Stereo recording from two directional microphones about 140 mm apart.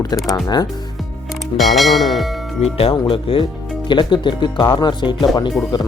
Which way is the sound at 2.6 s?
50° left (ahead or behind).